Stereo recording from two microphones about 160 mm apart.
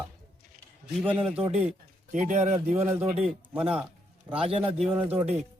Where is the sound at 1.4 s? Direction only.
45° right (ahead or behind).